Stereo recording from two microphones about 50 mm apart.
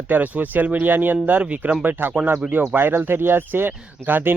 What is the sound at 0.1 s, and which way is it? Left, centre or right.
Speech, right.